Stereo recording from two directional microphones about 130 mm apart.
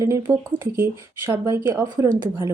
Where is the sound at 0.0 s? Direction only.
20° right (ahead or behind).